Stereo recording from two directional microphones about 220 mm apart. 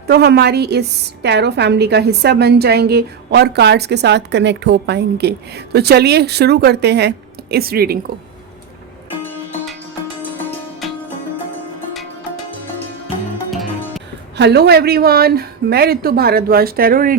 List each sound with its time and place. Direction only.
0.1 s a woman's voice: 50° right (ahead or behind)
9.2 s music: 10° left (ahead or behind)
13.5 s music: centre (ahead or behind)
14.3 s a woman's voice: 50° right (ahead or behind)